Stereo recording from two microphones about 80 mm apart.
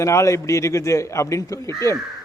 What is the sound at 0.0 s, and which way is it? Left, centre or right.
A man's voice, left.